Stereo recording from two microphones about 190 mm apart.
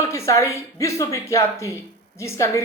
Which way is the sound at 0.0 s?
15° left (ahead or behind).